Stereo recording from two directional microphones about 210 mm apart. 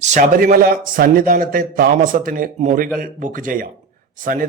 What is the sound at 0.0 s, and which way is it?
A man's voice, 35° right (ahead or behind).